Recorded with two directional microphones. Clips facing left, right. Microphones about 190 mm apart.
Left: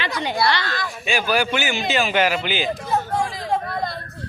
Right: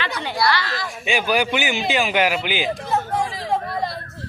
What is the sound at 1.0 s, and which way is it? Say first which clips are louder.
Speech: right 1 dB; 15° right (ahead or behind).